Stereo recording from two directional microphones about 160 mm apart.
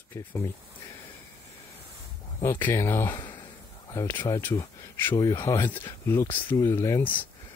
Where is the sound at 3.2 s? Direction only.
25° left (ahead or behind).